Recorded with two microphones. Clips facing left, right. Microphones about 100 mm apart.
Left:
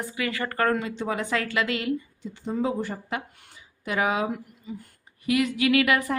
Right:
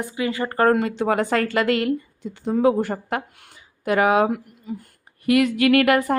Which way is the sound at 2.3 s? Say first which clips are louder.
Right 8 dB; 65° right (ahead or behind).